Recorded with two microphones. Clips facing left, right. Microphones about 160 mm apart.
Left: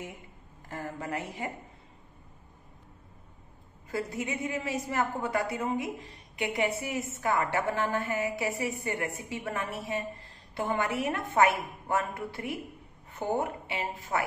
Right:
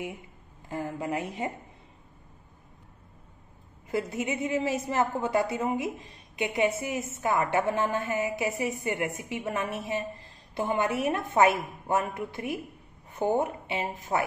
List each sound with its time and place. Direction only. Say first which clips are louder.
0.7 s a woman's voice: right 4 dB; 15° right (ahead or behind)
3.9 s a woman's voice: right 3 dB; 20° right (ahead or behind)